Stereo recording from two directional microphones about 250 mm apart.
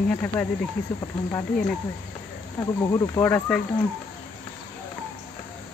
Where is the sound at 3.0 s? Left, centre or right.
Centre.